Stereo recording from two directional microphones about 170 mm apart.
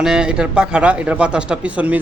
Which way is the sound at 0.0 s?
5° right (ahead or behind).